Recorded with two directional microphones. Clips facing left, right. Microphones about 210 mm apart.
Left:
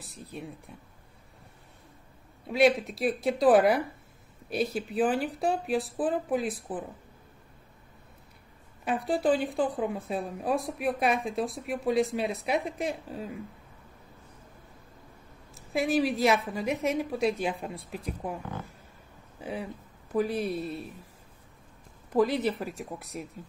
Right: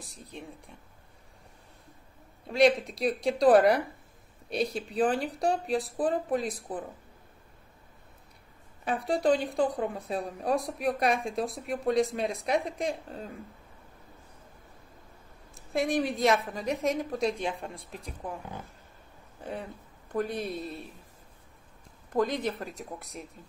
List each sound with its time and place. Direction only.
2.4 s speech: centre (ahead or behind)
8.8 s speech: centre (ahead or behind)
15.5 s speech: centre (ahead or behind)
19.4 s speech: 5° left (ahead or behind)
22.1 s speech: 5° left (ahead or behind)